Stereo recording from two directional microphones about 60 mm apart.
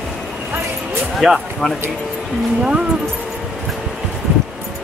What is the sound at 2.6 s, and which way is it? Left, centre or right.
Speech, centre.